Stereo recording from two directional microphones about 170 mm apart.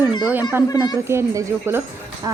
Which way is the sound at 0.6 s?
25° left (ahead or behind).